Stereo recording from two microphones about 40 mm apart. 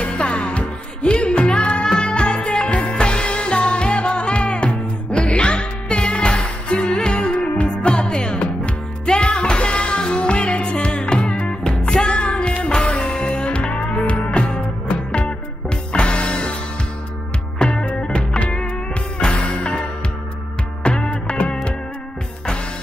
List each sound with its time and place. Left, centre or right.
0.0 s music: left
1.6 s music: left; by 12.2 s centre
12.2 s music: left
17.6 s music: left
20.8 s music: left